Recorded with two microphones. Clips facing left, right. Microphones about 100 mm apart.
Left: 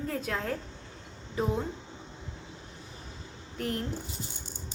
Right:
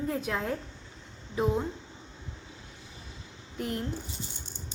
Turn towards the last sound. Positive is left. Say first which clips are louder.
# even
turn(degrees=-10)  # may be behind; listen again after turning